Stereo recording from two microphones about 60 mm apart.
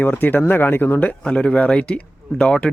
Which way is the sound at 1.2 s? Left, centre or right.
Centre.